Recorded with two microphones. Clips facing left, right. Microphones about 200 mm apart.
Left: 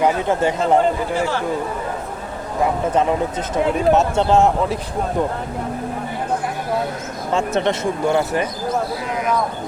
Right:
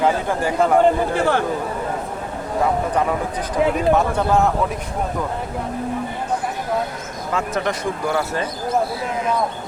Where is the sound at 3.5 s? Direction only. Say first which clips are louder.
Left 1 dB; 25° left (ahead or behind).